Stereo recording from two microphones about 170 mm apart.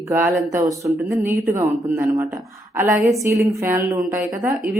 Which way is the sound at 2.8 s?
Centre (ahead or behind).